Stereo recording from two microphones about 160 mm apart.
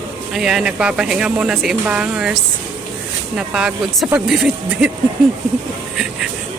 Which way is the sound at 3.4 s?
5° right (ahead or behind).